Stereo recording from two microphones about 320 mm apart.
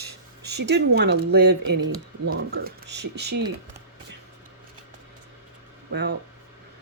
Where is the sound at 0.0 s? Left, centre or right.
Right.